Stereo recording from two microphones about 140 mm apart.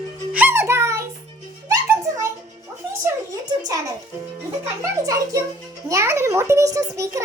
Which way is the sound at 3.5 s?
25° right (ahead or behind).